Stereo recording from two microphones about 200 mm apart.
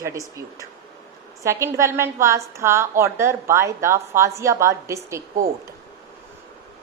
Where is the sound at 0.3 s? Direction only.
15° right (ahead or behind).